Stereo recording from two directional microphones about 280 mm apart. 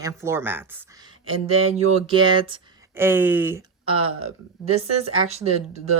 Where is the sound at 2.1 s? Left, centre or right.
Centre.